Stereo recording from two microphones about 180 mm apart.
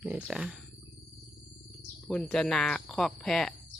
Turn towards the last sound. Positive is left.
turn(degrees=0)  # may be behind; listen again after turning